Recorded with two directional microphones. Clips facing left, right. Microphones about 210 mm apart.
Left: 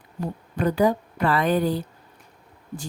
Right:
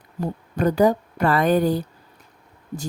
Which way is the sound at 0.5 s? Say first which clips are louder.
Right 3 dB; 45° right (ahead or behind).